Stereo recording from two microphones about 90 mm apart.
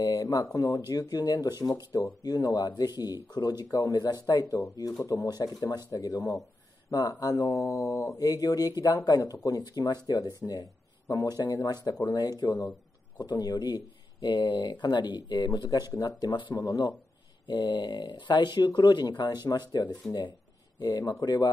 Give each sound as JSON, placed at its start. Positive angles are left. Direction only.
{"t": 0.0, "sound": "speech", "side_deg": 45}
{"t": 17.5, "sound": "speech", "side_deg": 60}